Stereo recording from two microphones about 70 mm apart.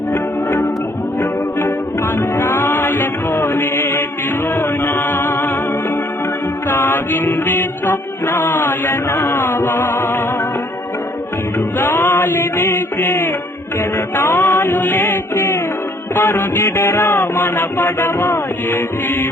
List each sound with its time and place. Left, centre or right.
0.1 s music: left
2.4 s music: left
3.3 s music: left
3.6 s music: left
6.7 s music: left
7.9 s chant: left
9.0 s music: left
11.9 s music: left
14.3 s music: left
14.7 s music: left
16.1 s chant: left